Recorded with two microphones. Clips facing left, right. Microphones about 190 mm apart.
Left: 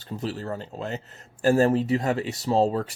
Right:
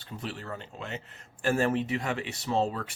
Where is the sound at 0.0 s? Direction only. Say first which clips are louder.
Left 7 dB; 35° left (ahead or behind).